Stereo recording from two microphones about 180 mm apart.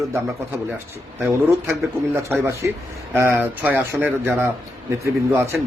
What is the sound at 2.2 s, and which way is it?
A man's voice, 15° right (ahead or behind).